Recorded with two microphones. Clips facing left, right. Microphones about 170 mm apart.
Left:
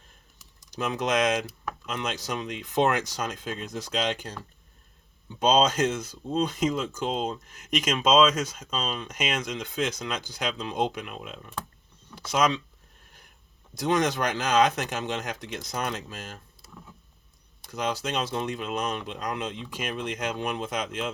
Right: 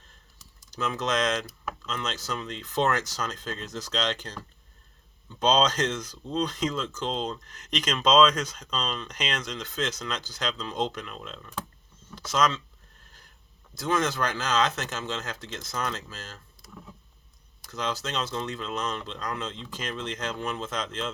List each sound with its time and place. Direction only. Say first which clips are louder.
0.3 s speech: left 1 dB; 15° left (ahead or behind)
13.7 s speech: left 2 dB; 20° left (ahead or behind)
17.7 s speech: left 2 dB; 10° left (ahead or behind)